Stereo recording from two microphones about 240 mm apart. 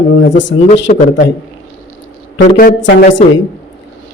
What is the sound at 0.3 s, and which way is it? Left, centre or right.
Speech, left.